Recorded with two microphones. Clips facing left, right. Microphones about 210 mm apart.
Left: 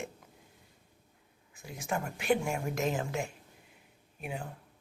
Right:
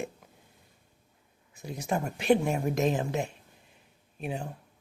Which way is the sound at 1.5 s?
40° right (ahead or behind).